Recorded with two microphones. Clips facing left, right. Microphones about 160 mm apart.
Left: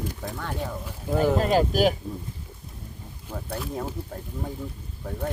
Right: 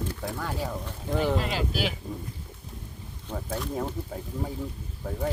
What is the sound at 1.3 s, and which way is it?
Speech, 45° left (ahead or behind).